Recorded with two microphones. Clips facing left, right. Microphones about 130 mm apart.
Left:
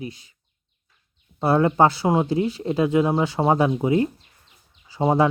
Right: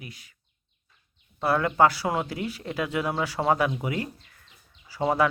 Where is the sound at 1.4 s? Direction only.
25° left (ahead or behind).